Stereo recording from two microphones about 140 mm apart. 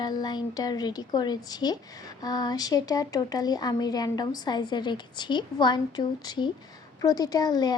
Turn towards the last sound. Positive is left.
turn(degrees=30)  # may be behind; listen again after turning